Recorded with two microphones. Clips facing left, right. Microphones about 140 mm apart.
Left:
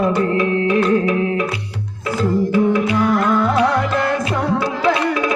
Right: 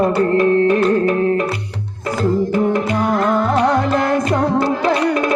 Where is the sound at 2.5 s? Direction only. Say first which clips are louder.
Left 1 dB; 45° right (ahead or behind).